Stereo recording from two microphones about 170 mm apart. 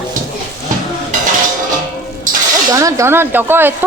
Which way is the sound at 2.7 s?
20° right (ahead or behind).